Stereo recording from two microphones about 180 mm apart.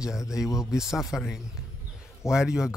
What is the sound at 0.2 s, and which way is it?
Speech, 15° left (ahead or behind).